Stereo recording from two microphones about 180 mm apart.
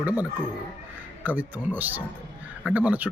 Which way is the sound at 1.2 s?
10° right (ahead or behind).